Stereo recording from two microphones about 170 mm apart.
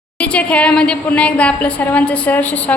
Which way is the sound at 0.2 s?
5° left (ahead or behind).